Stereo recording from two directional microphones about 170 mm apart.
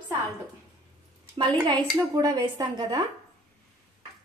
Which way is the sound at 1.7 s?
25° right (ahead or behind).